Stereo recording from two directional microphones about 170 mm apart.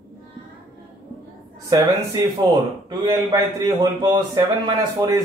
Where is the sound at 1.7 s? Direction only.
25° right (ahead or behind).